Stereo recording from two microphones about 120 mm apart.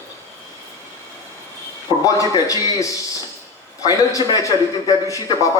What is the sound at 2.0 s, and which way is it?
A man's voice, 30° left (ahead or behind).